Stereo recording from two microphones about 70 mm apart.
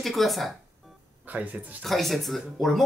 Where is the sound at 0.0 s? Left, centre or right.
Centre.